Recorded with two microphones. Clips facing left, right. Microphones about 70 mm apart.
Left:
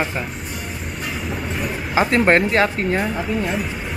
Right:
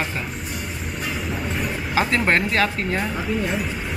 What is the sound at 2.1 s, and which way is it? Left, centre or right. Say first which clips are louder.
Speech: left 6 dB; left.